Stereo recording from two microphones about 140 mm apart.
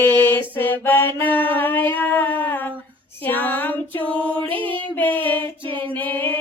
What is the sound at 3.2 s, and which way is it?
Female singing, 15° left (ahead or behind).